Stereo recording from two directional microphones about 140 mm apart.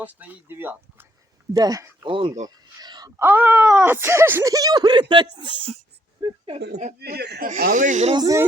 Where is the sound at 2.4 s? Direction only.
30° right (ahead or behind).